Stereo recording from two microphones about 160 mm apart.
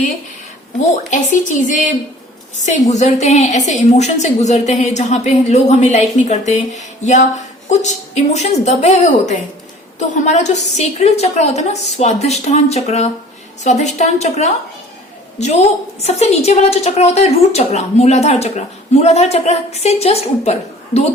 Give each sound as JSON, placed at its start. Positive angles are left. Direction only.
{"t": 0.9, "sound": "a woman's voice", "side_deg": 50}
{"t": 2.9, "sound": "a woman's voice", "side_deg": 45}